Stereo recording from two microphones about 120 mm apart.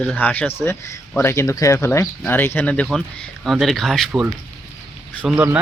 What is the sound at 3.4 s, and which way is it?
Speech, centre (ahead or behind).